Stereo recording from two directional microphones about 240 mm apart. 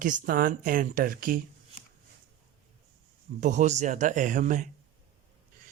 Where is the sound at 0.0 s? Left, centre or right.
Right.